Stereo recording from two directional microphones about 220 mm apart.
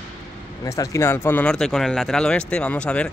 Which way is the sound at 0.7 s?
15° left (ahead or behind).